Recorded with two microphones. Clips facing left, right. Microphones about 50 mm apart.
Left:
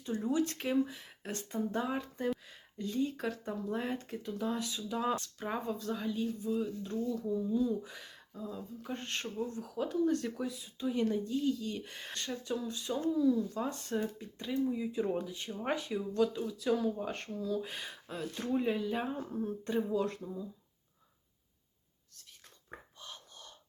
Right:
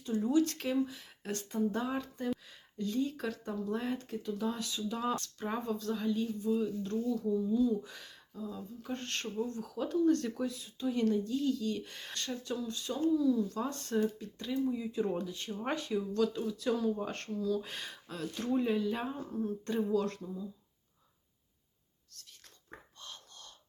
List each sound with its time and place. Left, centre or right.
0.3 s speech: left
5.9 s speech: centre
16.4 s speech: centre
17.3 s speech: centre
17.6 s speech: centre
19.3 s speech: left
22.7 s whispering: centre